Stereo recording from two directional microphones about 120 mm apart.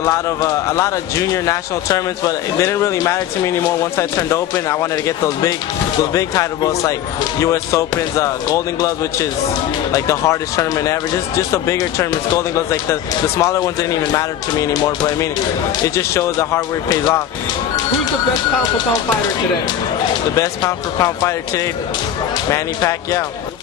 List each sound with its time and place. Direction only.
0.0 s speech: 25° left (ahead or behind)
20.3 s speech: 30° left (ahead or behind)